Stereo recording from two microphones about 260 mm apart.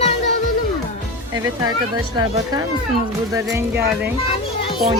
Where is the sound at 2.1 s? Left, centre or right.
Centre.